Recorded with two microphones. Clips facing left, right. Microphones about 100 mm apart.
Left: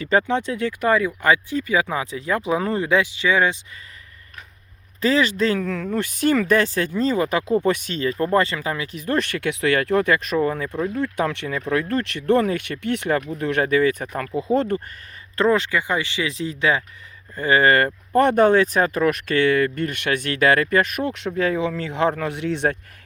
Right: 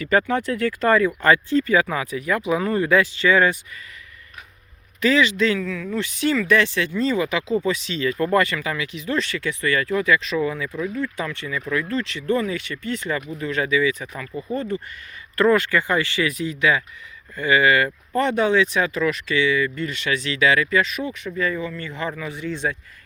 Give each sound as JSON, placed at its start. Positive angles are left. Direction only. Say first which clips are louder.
{"t": 0.0, "sound": "speech", "louder": "even", "side_deg": 25}
{"t": 2.8, "sound": "speech", "louder": "right 2 dB", "side_deg": 15}
{"t": 4.9, "sound": "speech", "louder": "right 1 dB", "side_deg": 35}
{"t": 5.6, "sound": "speech", "louder": "left 2 dB", "side_deg": 55}
{"t": 10.9, "sound": "speech", "louder": "left 4 dB", "side_deg": 60}
{"t": 14.3, "sound": "speech", "louder": "left 5 dB", "side_deg": 90}
{"t": 15.4, "sound": "speech", "louder": "right 1 dB", "side_deg": 20}